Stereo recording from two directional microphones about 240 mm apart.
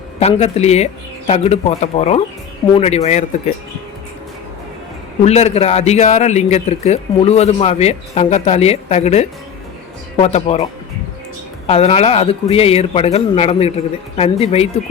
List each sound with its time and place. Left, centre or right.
0.2 s speech: left
5.2 s speech: left